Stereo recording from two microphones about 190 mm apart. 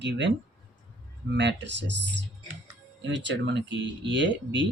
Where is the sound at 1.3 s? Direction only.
65° right (ahead or behind).